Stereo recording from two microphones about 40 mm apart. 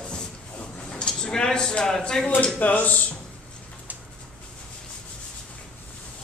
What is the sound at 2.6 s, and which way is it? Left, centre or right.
Speech, left.